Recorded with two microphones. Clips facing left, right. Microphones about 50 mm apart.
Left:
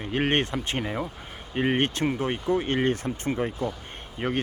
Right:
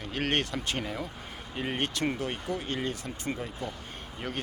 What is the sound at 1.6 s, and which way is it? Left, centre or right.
Speech, left.